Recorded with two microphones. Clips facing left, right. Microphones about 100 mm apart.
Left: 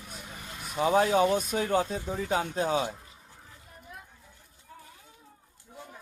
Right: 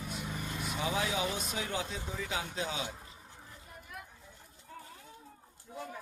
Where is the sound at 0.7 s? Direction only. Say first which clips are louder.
Left 11 dB; 45° left (ahead or behind).